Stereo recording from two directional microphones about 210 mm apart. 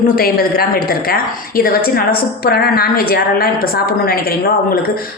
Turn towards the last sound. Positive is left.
turn(degrees=45)  # may be behind; listen again after turning